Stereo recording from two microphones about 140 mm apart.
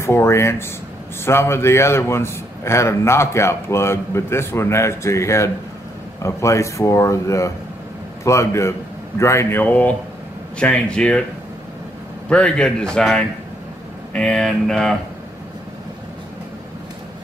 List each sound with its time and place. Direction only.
0.0 s a man's voice: 20° left (ahead or behind)
12.3 s a man's voice: 5° left (ahead or behind)
14.1 s a sound: 5° left (ahead or behind)